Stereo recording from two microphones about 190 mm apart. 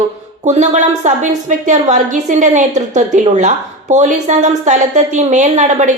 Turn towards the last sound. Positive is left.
turn(degrees=-40)  # may be behind; listen again after turning